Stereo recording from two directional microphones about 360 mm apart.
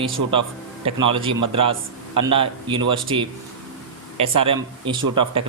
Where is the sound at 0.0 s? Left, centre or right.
Centre.